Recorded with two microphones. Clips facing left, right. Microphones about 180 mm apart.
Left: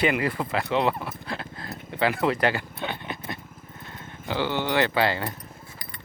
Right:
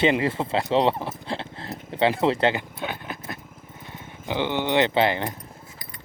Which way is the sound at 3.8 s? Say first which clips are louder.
Right 1 dB; 15° right (ahead or behind).